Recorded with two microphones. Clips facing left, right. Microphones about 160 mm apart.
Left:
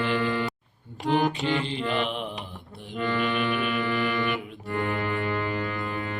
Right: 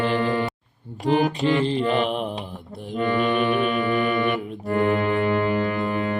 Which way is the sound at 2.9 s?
45° right (ahead or behind).